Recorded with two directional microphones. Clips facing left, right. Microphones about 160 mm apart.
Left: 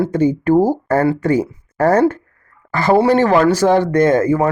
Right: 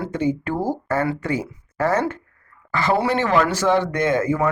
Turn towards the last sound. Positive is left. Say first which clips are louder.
# left 6 dB
turn(degrees=35)  # may be behind; listen again after turning